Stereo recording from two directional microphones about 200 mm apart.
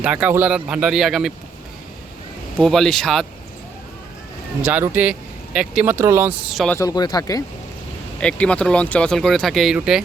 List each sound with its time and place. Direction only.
0.0 s speech: 5° right (ahead or behind)
2.6 s speech: centre (ahead or behind)
4.6 s speech: 10° right (ahead or behind)
6.7 s speech: 20° left (ahead or behind)
8.2 s speech: 5° left (ahead or behind)